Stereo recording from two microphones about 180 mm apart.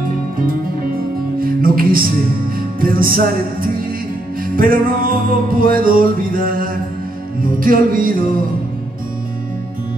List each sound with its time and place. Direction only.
1.4 s music: 50° right (ahead or behind)